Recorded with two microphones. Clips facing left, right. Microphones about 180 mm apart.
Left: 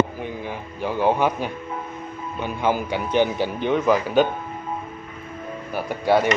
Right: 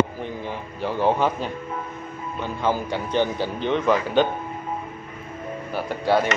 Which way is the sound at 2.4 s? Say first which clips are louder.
Left 1 dB; 15° left (ahead or behind).